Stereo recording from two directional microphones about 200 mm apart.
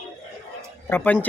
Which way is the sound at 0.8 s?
10° left (ahead or behind).